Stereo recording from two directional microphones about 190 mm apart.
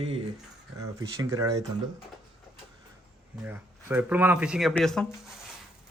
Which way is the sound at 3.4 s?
10° right (ahead or behind).